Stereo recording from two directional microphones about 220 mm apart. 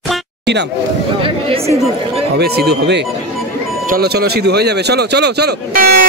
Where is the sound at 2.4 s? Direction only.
45° right (ahead or behind).